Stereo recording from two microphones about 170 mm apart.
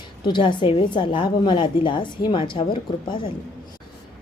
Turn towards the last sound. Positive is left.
turn(degrees=30)  # may be behind; listen again after turning